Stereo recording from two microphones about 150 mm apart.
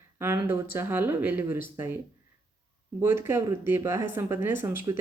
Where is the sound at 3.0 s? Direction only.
15° right (ahead or behind).